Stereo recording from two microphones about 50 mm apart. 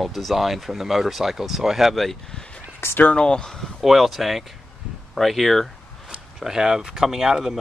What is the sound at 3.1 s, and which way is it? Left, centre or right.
Speech, centre.